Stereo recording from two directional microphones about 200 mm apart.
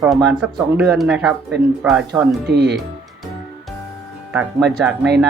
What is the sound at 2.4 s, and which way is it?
Speech, 55° right (ahead or behind).